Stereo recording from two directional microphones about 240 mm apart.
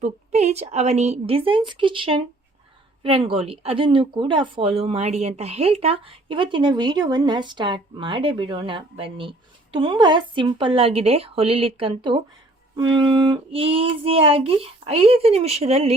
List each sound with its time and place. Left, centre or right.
0.0 s speech: right